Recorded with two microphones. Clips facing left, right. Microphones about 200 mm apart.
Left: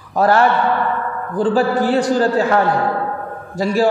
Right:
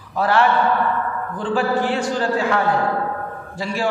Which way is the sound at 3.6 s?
40° left (ahead or behind).